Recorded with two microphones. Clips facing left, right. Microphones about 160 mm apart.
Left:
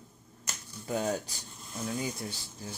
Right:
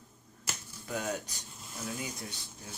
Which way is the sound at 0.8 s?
30° left (ahead or behind).